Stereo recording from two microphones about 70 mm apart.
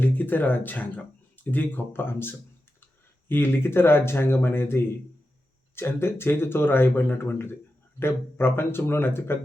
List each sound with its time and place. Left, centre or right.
0.0 s speech: left